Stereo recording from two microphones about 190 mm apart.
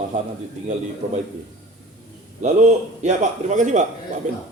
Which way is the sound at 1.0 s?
40° right (ahead or behind).